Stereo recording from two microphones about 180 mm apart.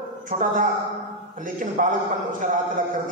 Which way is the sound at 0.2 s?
50° right (ahead or behind).